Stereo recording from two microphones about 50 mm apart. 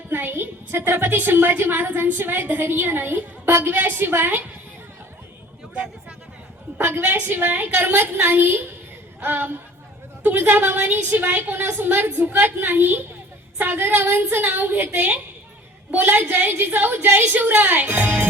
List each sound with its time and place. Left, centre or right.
0.1 s a woman's voice: right
6.7 s a woman's voice: right
15.9 s a woman's voice: right